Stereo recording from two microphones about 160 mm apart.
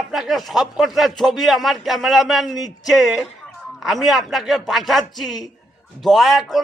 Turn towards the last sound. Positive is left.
turn(degrees=0)  # may be behind; listen again after turning